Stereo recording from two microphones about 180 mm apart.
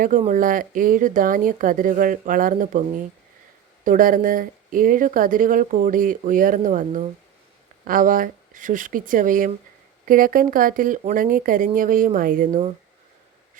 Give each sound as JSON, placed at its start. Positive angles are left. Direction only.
{"t": 0.3, "sound": "speech", "side_deg": -50}
{"t": 3.8, "sound": "speech", "side_deg": -50}